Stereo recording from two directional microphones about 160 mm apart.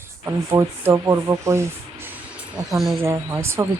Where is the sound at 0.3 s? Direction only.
15° right (ahead or behind).